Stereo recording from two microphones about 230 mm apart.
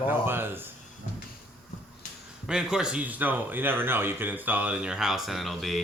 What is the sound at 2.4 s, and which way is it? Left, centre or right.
Speech, centre.